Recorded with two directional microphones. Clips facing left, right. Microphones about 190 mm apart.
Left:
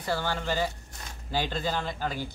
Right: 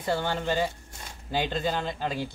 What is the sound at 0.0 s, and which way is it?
Speech, 25° right (ahead or behind).